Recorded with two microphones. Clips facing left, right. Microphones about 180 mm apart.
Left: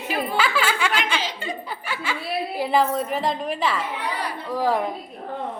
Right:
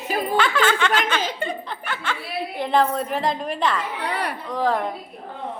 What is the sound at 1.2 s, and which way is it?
Speech, 55° right (ahead or behind).